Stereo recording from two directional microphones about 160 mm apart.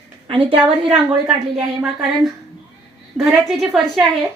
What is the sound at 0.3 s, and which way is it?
Speech, 35° right (ahead or behind).